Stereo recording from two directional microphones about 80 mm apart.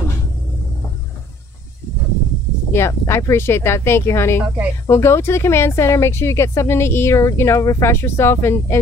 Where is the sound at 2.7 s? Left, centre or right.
Left.